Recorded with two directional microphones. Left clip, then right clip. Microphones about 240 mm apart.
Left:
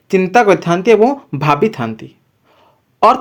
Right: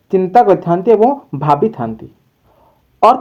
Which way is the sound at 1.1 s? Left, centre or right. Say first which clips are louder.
Right 1 dB; left.